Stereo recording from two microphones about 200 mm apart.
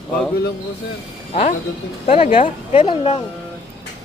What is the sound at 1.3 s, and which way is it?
Speech, 30° left (ahead or behind).